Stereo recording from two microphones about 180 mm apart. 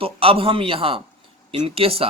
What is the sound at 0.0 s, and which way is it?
A man's voice, 30° right (ahead or behind).